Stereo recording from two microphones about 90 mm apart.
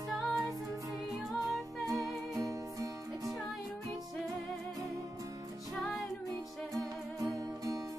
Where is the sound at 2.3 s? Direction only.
40° right (ahead or behind).